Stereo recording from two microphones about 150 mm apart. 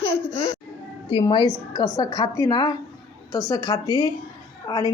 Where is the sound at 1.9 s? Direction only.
25° left (ahead or behind).